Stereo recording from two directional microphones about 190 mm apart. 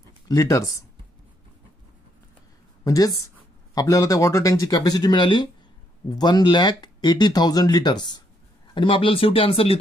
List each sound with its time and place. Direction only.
0.3 s speech: 15° left (ahead or behind)
2.8 s a woman's voice: 20° left (ahead or behind)